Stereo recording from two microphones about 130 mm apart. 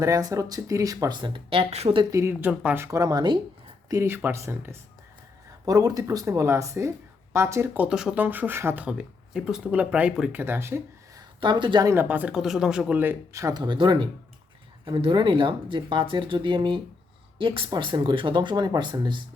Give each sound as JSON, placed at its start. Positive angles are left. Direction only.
{"t": 0.0, "sound": "speech", "side_deg": -25}
{"t": 2.0, "sound": "speech", "side_deg": -25}
{"t": 10.4, "sound": "speech", "side_deg": -20}
{"t": 11.3, "sound": "speech", "side_deg": -35}
{"t": 11.9, "sound": "speech", "side_deg": -15}
{"t": 13.5, "sound": "speech", "side_deg": -35}